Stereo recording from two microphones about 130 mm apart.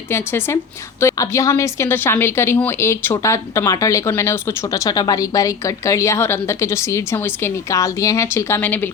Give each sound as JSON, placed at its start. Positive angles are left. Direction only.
{"t": 0.1, "sound": "a woman's voice", "side_deg": 20}